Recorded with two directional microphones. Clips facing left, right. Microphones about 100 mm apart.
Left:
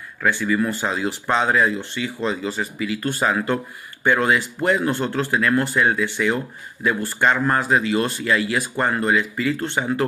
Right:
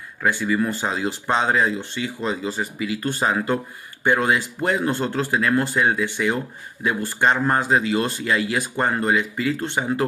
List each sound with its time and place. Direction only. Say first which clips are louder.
0.2 s a man's voice: left 1 dB; 15° right (ahead or behind)